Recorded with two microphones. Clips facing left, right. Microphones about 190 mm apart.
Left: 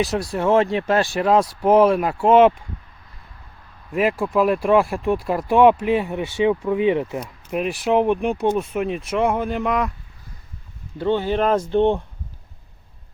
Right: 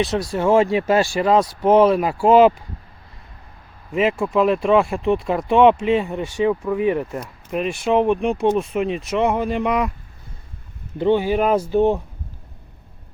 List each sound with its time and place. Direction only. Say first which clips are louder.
0.0 s speech: right 1 dB; centre (ahead or behind)
3.9 s speech: right 1 dB; centre (ahead or behind)
6.4 s speech: left 1 dB; 20° left (ahead or behind)
7.2 s speech: even; 5° left (ahead or behind)
10.9 s speech: right 3 dB; 15° right (ahead or behind)